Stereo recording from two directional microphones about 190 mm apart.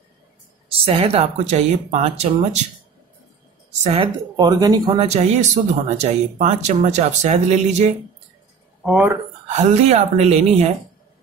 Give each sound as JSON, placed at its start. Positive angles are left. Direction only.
{"t": 0.7, "sound": "speech", "side_deg": -30}
{"t": 3.8, "sound": "speech", "side_deg": -25}
{"t": 5.0, "sound": "speech", "side_deg": -35}
{"t": 8.8, "sound": "speech", "side_deg": -5}
{"t": 9.5, "sound": "speech", "side_deg": -35}